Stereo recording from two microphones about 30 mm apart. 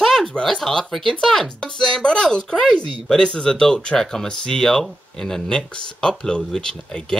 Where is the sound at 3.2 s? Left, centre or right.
Left.